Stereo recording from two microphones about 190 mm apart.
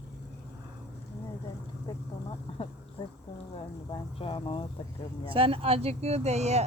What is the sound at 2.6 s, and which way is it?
Speech, 25° left (ahead or behind).